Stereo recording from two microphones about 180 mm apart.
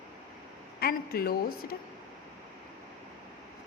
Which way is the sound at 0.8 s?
55° left (ahead or behind).